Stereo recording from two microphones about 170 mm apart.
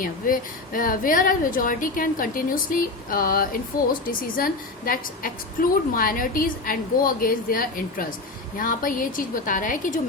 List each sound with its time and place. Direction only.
0.0 s a woman's voice: 55° left (ahead or behind)